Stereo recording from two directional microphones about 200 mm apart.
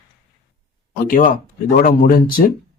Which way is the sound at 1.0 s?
45° left (ahead or behind).